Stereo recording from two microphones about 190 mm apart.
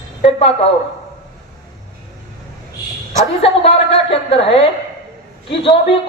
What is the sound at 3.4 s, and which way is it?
A woman's voice, 30° left (ahead or behind).